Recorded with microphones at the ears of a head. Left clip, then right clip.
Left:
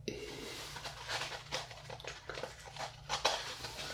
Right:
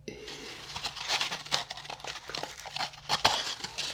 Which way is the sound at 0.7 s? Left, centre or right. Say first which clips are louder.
Right 11 dB; right.